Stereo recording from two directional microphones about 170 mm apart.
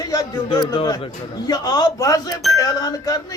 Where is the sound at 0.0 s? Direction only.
20° left (ahead or behind).